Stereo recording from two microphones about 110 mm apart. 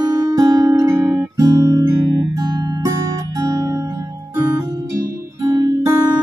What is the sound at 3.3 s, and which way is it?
Music, 30° right (ahead or behind).